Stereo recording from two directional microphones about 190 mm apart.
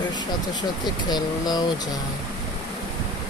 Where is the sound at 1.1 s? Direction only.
20° left (ahead or behind).